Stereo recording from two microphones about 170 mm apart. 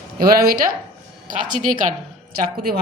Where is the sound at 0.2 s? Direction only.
65° right (ahead or behind).